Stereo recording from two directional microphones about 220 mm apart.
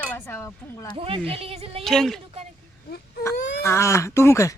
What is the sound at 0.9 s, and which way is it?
Speech, 25° right (ahead or behind).